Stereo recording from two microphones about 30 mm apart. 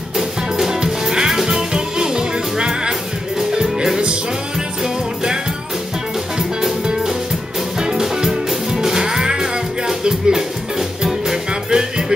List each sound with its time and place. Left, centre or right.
0.7 s music: right
1.3 s music: centre
1.7 s music: right
4.8 s music: right
6.9 s music: centre